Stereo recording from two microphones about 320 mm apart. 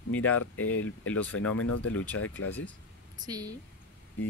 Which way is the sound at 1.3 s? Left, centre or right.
Left.